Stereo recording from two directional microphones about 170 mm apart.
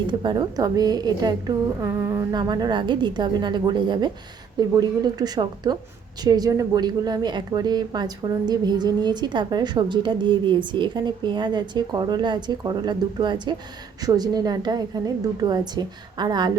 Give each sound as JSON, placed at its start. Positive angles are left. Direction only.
{"t": 0.1, "sound": "a woman's voice", "side_deg": -25}